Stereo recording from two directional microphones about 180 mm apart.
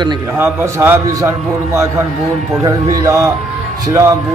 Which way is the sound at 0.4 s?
15° right (ahead or behind).